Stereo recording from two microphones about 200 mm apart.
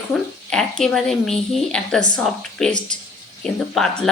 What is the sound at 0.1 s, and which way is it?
A woman's voice, 5° left (ahead or behind).